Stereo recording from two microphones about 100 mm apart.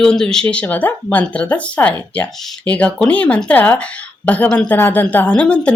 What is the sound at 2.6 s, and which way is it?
Speech, 15° left (ahead or behind).